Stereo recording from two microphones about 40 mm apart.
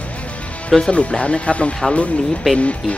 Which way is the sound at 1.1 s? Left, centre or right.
Left.